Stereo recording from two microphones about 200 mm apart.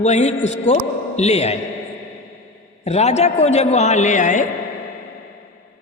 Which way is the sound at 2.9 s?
35° left (ahead or behind).